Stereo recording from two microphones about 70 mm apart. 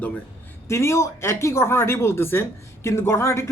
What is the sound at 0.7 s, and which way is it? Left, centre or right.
A woman's voice, left.